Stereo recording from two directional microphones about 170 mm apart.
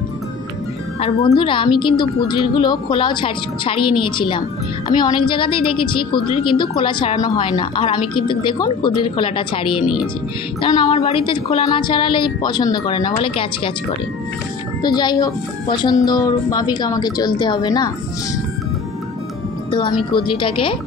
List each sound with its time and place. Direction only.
1.4 s a woman's voice: 30° left (ahead or behind)
14.8 s a woman's voice: 25° left (ahead or behind)
19.7 s a woman's voice: 30° left (ahead or behind)